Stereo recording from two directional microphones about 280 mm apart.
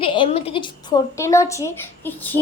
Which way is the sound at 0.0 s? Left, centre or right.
Centre.